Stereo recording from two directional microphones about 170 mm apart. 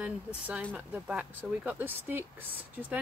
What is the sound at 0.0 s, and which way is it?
Speech, 10° right (ahead or behind).